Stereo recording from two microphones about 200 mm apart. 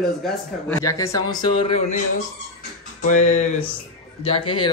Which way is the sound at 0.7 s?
15° left (ahead or behind).